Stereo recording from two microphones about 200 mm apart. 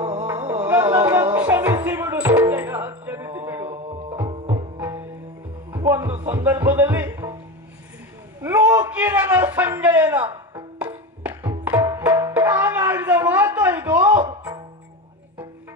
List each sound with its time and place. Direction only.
0.3 s music: 10° right (ahead or behind)
3.6 s music: 25° right (ahead or behind)
4.7 s music: 10° right (ahead or behind)
8.4 s a sound: 10° right (ahead or behind)
12.1 s music: 15° right (ahead or behind)